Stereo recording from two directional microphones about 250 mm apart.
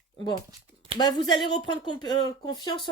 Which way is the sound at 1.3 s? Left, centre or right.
Centre.